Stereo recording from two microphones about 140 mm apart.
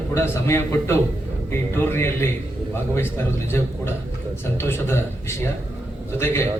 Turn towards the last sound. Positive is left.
turn(degrees=20)  # may be behind; listen again after turning